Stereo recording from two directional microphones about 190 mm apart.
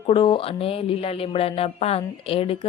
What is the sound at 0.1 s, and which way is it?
A woman's voice, 25° left (ahead or behind).